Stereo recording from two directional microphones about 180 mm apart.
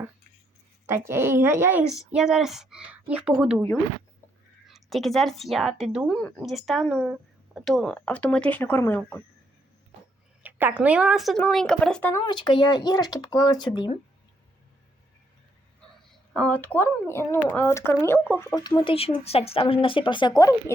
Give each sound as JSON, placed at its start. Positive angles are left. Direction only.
{"t": 0.9, "sound": "a woman's voice", "side_deg": -15}
{"t": 4.7, "sound": "a woman's voice", "side_deg": 0}
{"t": 10.4, "sound": "a woman's voice", "side_deg": -10}
{"t": 12.1, "sound": "speech", "side_deg": 25}
{"t": 16.3, "sound": "speech", "side_deg": 5}